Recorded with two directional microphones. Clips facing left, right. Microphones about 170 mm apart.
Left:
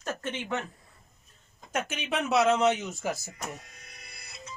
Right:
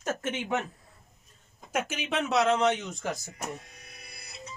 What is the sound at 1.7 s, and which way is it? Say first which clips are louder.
Speech: right 1 dB; 5° right (ahead or behind).